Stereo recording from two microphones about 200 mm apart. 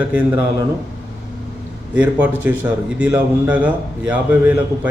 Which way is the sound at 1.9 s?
10° right (ahead or behind).